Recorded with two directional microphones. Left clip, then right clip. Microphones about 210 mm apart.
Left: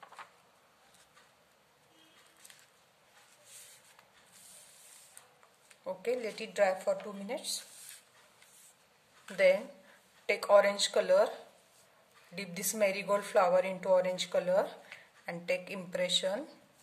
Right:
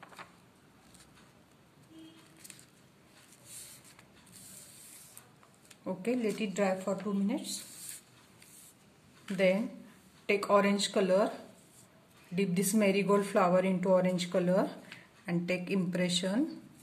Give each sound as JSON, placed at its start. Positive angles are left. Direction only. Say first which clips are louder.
{"t": 5.9, "sound": "a woman's voice", "louder": "right 1 dB", "side_deg": 20}
{"t": 9.3, "sound": "a woman's voice", "louder": "left 2 dB", "side_deg": 25}
{"t": 12.4, "sound": "a woman's voice", "louder": "right 2 dB", "side_deg": 20}